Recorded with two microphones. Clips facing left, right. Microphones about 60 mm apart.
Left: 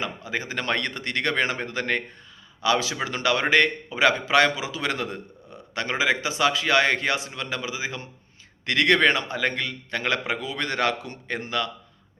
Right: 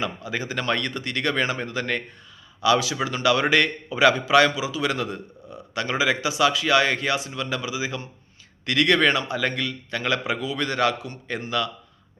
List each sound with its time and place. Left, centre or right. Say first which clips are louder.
0.0 s a man's voice: right 1 dB; left